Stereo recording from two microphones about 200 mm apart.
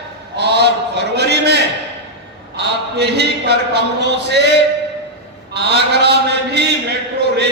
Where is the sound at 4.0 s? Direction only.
55° right (ahead or behind).